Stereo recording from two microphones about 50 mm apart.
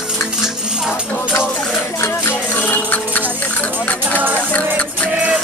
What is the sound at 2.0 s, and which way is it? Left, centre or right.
Music, left.